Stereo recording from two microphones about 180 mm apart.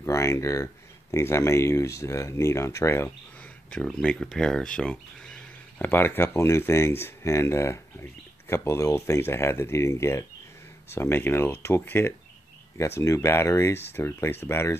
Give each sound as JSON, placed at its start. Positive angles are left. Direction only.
{"t": 0.0, "sound": "speech", "side_deg": 15}